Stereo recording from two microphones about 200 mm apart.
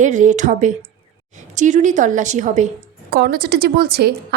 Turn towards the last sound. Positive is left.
turn(degrees=-50)  # may be behind; listen again after turning